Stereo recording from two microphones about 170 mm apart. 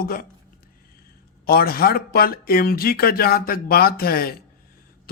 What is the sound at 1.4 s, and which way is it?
Speech, 65° left (ahead or behind).